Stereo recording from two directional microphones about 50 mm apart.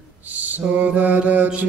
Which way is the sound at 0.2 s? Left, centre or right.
Right.